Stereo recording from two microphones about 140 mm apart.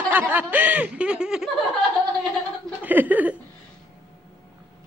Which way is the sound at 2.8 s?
10° right (ahead or behind).